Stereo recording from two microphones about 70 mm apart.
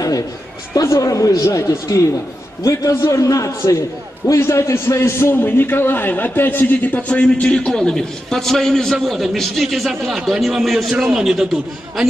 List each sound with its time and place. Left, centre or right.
0.7 s a man's voice: left; by 11.4 s centre